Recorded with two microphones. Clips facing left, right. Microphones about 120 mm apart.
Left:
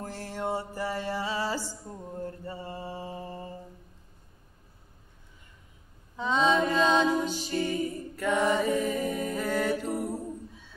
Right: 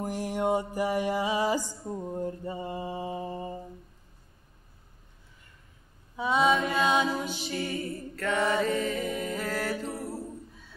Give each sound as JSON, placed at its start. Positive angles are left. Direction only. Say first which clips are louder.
{"t": 0.0, "sound": "mantra", "louder": "right 5 dB", "side_deg": -15}
{"t": 6.1, "sound": "mantra", "louder": "right 1 dB", "side_deg": -10}
{"t": 6.7, "sound": "music", "louder": "left 2 dB", "side_deg": -10}
{"t": 7.6, "sound": "mantra", "louder": "left 3 dB", "side_deg": 15}
{"t": 9.4, "sound": "music", "louder": "left 7 dB", "side_deg": 0}
{"t": 9.9, "sound": "a sound", "louder": "left 4 dB", "side_deg": 15}